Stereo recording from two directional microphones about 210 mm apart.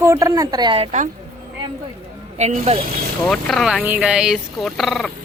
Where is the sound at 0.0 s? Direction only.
15° right (ahead or behind); by 1.1 s 35° right (ahead or behind).